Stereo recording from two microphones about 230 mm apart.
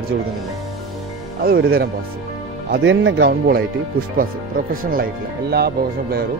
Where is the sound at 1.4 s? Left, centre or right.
Right.